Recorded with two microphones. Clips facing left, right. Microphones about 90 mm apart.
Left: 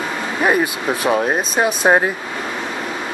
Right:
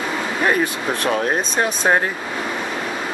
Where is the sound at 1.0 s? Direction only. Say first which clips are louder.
Left 3 dB; 10° left (ahead or behind).